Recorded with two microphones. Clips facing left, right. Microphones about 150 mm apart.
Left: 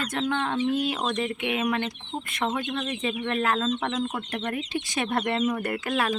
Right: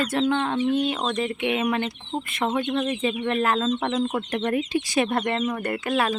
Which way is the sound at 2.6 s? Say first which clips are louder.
Right 5 dB; 20° right (ahead or behind).